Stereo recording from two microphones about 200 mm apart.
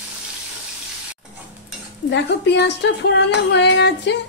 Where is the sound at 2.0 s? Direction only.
60° left (ahead or behind).